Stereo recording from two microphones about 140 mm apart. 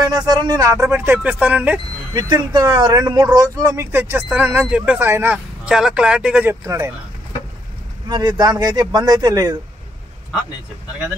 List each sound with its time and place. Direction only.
0.0 s speech: 30° right (ahead or behind); by 1.8 s 10° right (ahead or behind)
2.1 s speech: 30° right (ahead or behind); by 5.4 s 15° right (ahead or behind)
5.7 s speech: 5° right (ahead or behind)
6.6 s speech: 20° right (ahead or behind)
8.1 s speech: 30° right (ahead or behind)